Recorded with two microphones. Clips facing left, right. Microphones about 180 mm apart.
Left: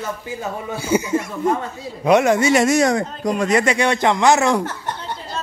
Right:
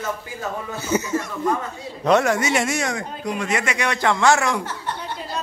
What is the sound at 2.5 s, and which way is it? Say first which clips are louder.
Speech: left 7 dB; 40° left (ahead or behind).